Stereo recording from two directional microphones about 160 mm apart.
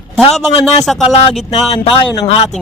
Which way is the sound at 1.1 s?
40° left (ahead or behind).